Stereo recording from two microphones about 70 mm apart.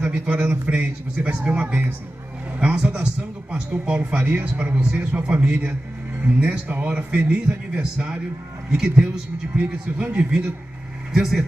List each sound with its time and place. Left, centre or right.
0.0 s speech: centre
2.6 s speech: centre
5.4 s a man's voice: right
6.2 s speech: right
9.6 s speech: right
11.1 s speech: centre